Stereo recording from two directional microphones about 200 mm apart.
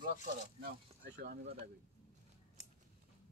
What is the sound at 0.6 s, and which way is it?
Speech, 50° right (ahead or behind).